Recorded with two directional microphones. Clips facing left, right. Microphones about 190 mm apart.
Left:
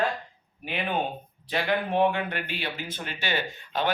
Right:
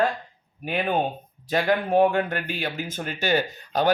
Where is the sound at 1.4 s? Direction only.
45° right (ahead or behind).